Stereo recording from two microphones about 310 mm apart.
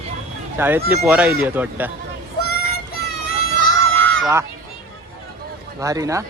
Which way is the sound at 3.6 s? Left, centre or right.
Centre.